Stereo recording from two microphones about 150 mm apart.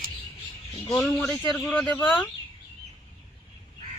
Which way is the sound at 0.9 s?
20° left (ahead or behind).